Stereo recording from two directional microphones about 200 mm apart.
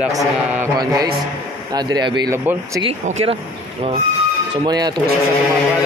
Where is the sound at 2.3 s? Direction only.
10° right (ahead or behind).